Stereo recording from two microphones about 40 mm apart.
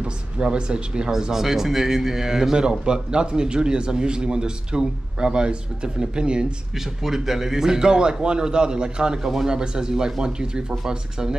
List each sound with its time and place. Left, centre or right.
0.0 s speech: right
1.3 s a man's voice: centre
7.0 s a man's voice: centre